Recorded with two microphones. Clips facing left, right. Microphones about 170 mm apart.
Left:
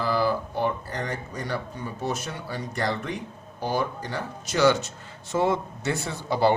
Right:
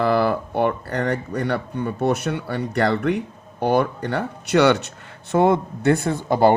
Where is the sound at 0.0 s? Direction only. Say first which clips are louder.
Right 6 dB; 65° right (ahead or behind).